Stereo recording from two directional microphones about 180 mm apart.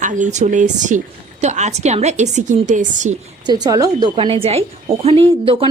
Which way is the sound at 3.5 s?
20° right (ahead or behind).